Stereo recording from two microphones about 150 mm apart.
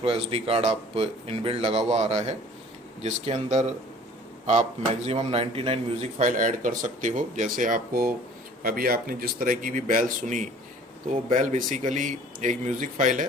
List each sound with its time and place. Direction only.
0.0 s a man's voice: 40° right (ahead or behind); by 13.2 s 60° right (ahead or behind)